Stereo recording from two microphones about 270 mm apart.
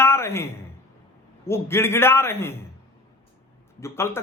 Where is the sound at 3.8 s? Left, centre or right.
Centre.